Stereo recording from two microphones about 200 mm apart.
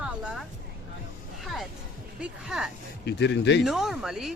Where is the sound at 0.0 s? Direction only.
5° right (ahead or behind).